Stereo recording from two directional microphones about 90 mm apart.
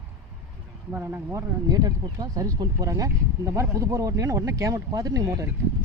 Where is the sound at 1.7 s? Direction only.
45° right (ahead or behind).